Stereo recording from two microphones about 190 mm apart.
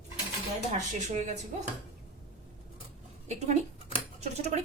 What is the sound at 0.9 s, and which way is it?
Speech, 40° right (ahead or behind).